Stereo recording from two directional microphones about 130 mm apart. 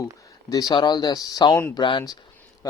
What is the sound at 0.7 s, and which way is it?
Speech, 35° left (ahead or behind).